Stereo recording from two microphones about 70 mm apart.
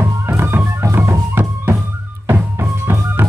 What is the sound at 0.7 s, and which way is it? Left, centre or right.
Music, right.